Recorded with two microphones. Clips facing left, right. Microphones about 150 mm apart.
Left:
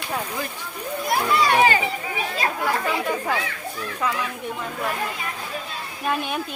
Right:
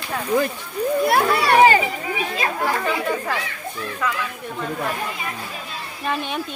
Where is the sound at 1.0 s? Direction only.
65° right (ahead or behind).